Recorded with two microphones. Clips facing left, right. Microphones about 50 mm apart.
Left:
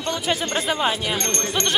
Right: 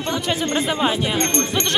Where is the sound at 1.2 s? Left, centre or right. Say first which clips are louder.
Right 4 dB; right.